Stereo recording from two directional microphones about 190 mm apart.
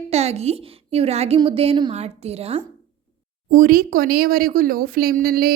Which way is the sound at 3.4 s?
50° right (ahead or behind).